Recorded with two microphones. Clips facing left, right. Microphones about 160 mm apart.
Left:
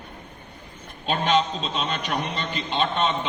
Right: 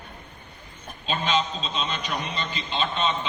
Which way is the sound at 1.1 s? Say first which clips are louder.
Left 4 dB; 60° left (ahead or behind).